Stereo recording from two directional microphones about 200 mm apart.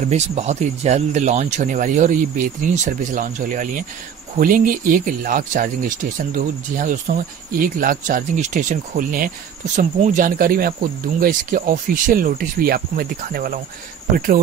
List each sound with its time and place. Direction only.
0.1 s speech: 35° right (ahead or behind)